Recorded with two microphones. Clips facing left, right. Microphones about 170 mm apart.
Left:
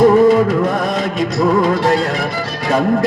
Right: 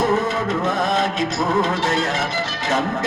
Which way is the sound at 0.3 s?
25° right (ahead or behind).